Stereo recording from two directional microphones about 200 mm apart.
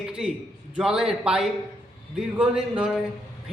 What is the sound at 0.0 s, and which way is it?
A man's voice, 5° right (ahead or behind).